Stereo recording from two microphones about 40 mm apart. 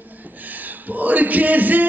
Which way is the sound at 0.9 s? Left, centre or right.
Right.